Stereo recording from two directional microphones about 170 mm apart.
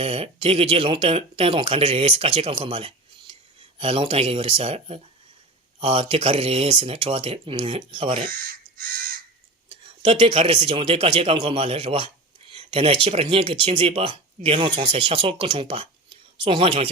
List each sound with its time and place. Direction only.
0.0 s a man's voice: 35° right (ahead or behind)
8.3 s crow: 60° right (ahead or behind)
10.0 s a man's voice: 30° right (ahead or behind)